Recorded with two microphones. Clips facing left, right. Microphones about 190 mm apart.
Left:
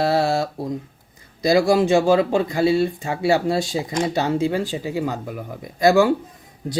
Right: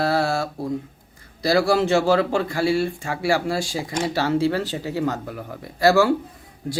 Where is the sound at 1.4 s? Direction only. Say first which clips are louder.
Left 2 dB; 15° left (ahead or behind).